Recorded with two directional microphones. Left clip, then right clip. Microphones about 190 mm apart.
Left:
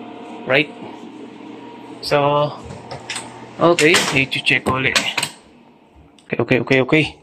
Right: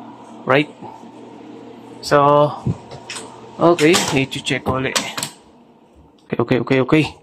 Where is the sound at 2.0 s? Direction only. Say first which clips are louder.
Right 4 dB; 30° right (ahead or behind).